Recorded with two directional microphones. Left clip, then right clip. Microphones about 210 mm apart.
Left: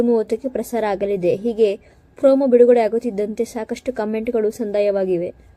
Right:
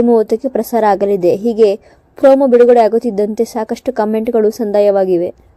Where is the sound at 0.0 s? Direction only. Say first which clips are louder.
Right 7 dB; 15° right (ahead or behind).